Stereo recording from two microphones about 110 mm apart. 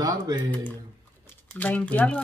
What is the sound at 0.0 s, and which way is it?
Speech, 35° right (ahead or behind).